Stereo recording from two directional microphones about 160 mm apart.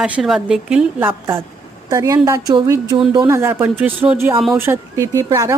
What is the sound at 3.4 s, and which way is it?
A woman's voice, 15° right (ahead or behind).